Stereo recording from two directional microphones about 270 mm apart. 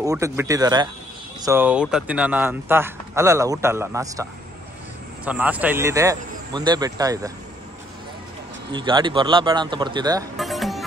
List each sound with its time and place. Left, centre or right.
0.0 s speech: centre
8.7 s speech: centre
10.3 s music: centre